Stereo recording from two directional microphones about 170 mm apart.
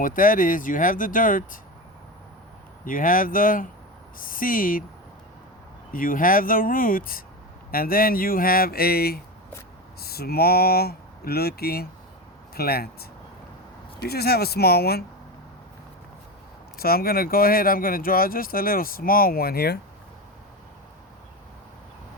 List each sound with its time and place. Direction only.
0.0 s speech: 50° left (ahead or behind)
2.8 s speech: 55° left (ahead or behind)
5.9 s speech: 55° left (ahead or behind)
16.7 s speech: 60° left (ahead or behind)